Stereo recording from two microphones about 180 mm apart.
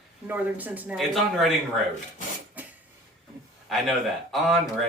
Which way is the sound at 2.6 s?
10° right (ahead or behind).